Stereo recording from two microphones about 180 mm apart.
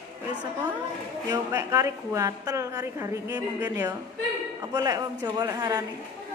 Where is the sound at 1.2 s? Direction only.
20° right (ahead or behind).